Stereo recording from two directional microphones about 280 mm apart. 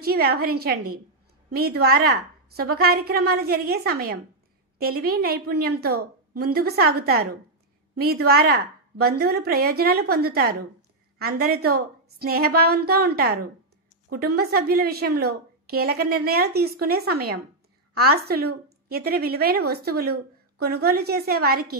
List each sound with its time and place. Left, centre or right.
0.0 s a woman's voice: right